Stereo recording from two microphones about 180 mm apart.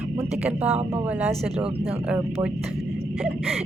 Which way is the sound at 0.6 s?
35° right (ahead or behind).